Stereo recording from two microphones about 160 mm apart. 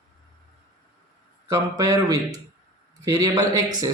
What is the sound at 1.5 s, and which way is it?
Speech, 20° right (ahead or behind).